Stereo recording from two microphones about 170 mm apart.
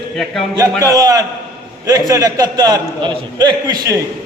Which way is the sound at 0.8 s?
20° right (ahead or behind).